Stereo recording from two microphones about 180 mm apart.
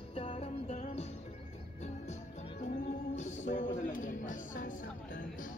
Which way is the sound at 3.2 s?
40° left (ahead or behind).